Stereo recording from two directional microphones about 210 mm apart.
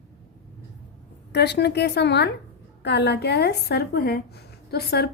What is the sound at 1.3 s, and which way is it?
A woman's voice, 50° left (ahead or behind).